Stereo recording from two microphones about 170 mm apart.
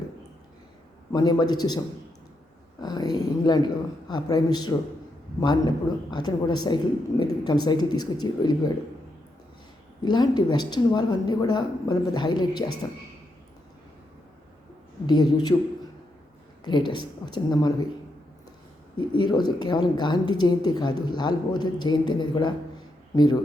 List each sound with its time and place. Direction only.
1.1 s a woman's voice: 25° left (ahead or behind)
2.8 s a sound: 25° left (ahead or behind)
4.1 s a woman's voice: 25° left (ahead or behind)
10.0 s a woman's voice: 25° left (ahead or behind)
15.0 s a woman's voice: 25° left (ahead or behind)
16.6 s a woman's voice: 25° left (ahead or behind)
18.9 s a woman's voice: 25° left (ahead or behind)